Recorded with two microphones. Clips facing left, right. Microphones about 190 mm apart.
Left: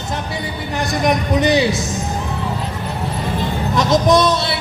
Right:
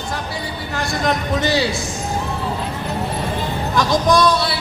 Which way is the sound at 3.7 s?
20° left (ahead or behind).